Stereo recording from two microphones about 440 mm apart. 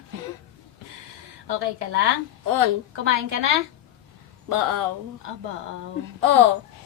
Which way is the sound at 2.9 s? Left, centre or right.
Right.